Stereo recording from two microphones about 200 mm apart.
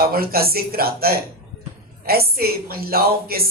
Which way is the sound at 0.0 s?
50° right (ahead or behind).